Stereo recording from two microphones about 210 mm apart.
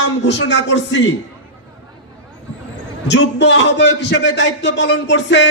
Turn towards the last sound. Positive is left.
turn(degrees=55)  # may be behind; listen again after turning